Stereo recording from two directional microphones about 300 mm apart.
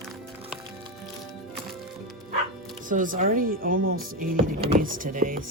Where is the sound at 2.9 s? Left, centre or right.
Right.